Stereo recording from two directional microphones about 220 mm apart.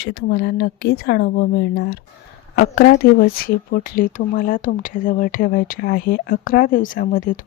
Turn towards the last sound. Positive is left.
turn(degrees=40)  # may be behind; listen again after turning